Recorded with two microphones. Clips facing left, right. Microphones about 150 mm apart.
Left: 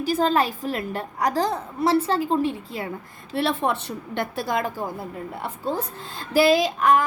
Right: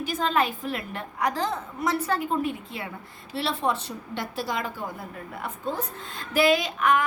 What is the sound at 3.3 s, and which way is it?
A woman's voice, 55° left (ahead or behind).